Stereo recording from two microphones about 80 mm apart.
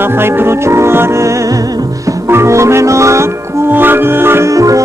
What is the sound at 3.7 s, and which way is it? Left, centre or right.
Music, right.